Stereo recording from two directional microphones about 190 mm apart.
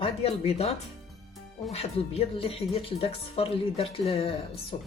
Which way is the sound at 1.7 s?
30° left (ahead or behind).